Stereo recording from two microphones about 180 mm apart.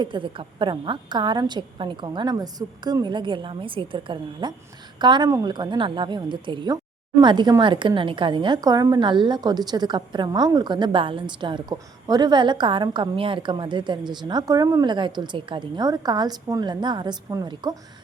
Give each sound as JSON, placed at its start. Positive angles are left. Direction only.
{"t": 0.0, "sound": "a woman's voice", "side_deg": -25}